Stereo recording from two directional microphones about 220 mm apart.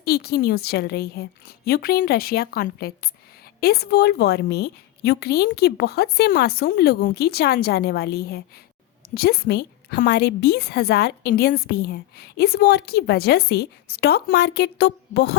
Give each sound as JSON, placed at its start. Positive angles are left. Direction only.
{"t": 0.0, "sound": "a woman's voice", "side_deg": 45}